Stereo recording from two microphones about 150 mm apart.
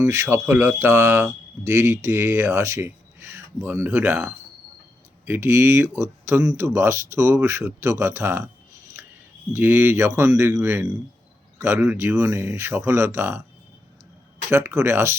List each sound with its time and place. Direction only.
0.1 s speech: 15° right (ahead or behind)
9.5 s speech: 15° right (ahead or behind)
14.5 s speech: 15° right (ahead or behind)